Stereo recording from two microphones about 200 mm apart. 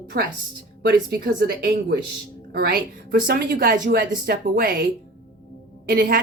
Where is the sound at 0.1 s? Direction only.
50° right (ahead or behind).